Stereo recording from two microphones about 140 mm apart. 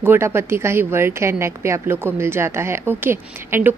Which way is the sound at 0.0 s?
15° right (ahead or behind).